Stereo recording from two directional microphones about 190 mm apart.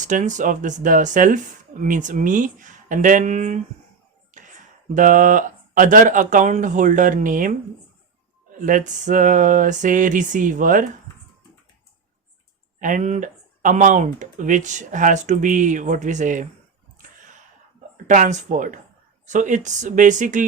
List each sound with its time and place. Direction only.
0.0 s speech: 40° right (ahead or behind)
4.3 s a sound: 40° right (ahead or behind)
4.9 s speech: 45° right (ahead or behind)
8.6 s speech: 40° right (ahead or behind)
12.8 s speech: 40° right (ahead or behind)
18.1 s speech: 40° right (ahead or behind)